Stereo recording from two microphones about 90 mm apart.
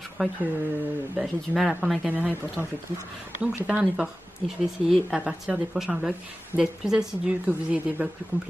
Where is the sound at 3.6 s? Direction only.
10° right (ahead or behind).